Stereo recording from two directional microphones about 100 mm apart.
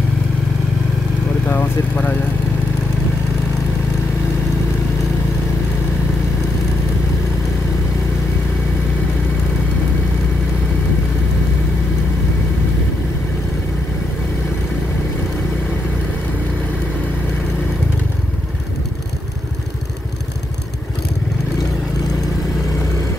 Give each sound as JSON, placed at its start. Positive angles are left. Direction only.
{"t": 1.5, "sound": "speech", "side_deg": 20}